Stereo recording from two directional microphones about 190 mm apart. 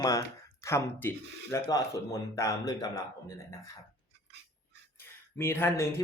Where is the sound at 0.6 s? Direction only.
15° left (ahead or behind).